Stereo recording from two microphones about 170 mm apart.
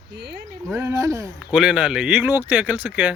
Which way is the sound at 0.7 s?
15° right (ahead or behind).